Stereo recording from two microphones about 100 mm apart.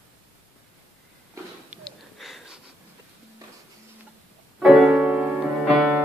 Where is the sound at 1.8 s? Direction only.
Centre (ahead or behind).